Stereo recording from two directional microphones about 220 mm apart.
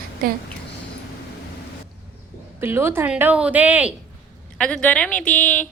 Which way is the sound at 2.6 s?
10° right (ahead or behind).